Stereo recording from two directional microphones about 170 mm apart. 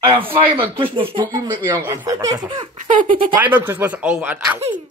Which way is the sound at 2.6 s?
45° right (ahead or behind).